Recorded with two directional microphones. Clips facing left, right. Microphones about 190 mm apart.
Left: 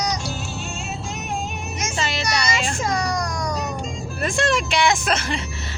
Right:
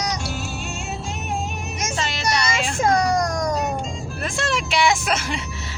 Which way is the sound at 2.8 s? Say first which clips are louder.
Right 5 dB; 55° right (ahead or behind).